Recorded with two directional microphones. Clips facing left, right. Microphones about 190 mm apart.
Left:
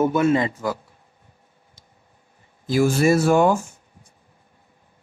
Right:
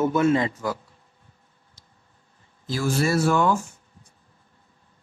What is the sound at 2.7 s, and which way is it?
Speech, 15° left (ahead or behind).